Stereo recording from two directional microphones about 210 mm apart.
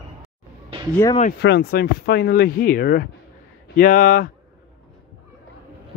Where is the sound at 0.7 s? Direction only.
25° right (ahead or behind).